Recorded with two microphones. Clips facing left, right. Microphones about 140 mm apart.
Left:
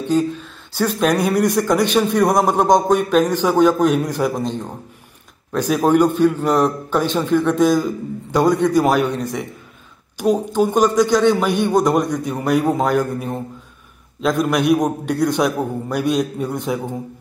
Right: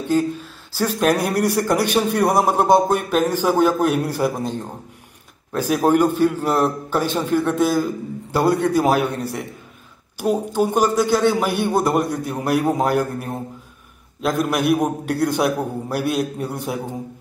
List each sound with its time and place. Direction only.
0.8 s a man's voice: 5° right (ahead or behind)
5.6 s a man's voice: 10° right (ahead or behind)
10.5 s a man's voice: 10° right (ahead or behind)